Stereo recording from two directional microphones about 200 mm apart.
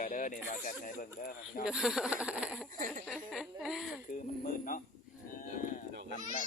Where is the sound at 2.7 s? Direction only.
40° right (ahead or behind).